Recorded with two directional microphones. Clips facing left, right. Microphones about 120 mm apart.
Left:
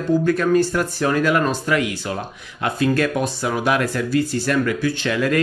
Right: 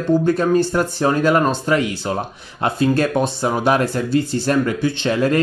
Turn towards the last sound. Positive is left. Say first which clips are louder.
# right 2 dB
turn(degrees=-30)  # may be behind; listen again after turning